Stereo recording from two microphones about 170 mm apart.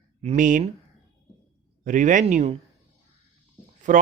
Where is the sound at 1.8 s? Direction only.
50° right (ahead or behind).